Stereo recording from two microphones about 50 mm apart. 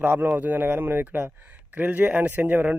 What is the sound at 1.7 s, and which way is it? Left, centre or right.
Speech, right.